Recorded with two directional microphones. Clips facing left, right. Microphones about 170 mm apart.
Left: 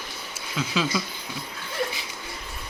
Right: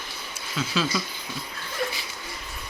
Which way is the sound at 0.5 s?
15° left (ahead or behind).